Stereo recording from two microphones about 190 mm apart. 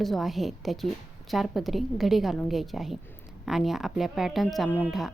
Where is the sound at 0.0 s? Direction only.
Centre (ahead or behind).